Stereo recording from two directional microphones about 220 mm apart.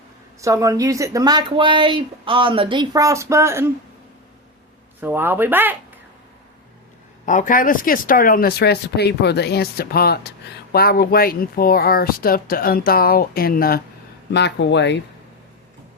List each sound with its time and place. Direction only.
0.4 s speech: 15° right (ahead or behind)
4.9 s speech: 10° right (ahead or behind)
7.3 s speech: 35° left (ahead or behind)
14.3 s speech: 55° left (ahead or behind)